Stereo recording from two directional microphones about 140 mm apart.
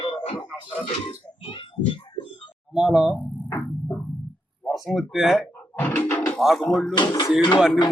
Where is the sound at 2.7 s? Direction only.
5° right (ahead or behind).